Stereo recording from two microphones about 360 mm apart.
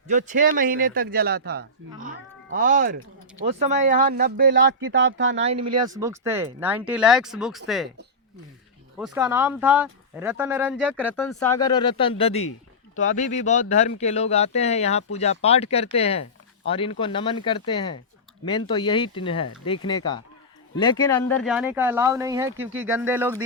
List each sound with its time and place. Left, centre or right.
0.1 s a man's voice: right
5.4 s speech: centre
9.0 s speech: centre
21.4 s speech: centre